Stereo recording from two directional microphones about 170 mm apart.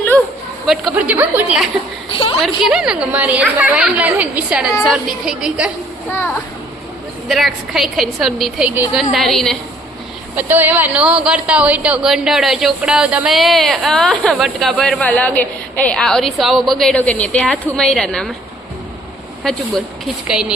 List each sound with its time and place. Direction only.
0.7 s a woman's voice: centre (ahead or behind)
2.0 s a woman's voice: 30° left (ahead or behind)
2.4 s a woman's voice: 5° right (ahead or behind)
6.1 s a child's voice: 10° left (ahead or behind)
7.3 s a woman's voice: centre (ahead or behind)
10.3 s a woman's voice: 10° right (ahead or behind)
20.2 s a woman's voice: 5° right (ahead or behind)